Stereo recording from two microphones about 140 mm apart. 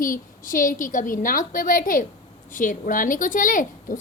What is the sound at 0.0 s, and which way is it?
A woman's voice, 75° left (ahead or behind).